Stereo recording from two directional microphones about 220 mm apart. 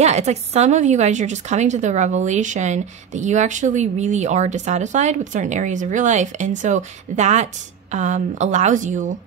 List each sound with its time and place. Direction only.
0.0 s a woman's voice: 30° right (ahead or behind)